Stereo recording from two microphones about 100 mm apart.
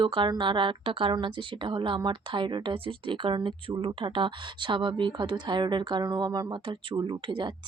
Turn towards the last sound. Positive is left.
turn(degrees=-50)  # may be behind; listen again after turning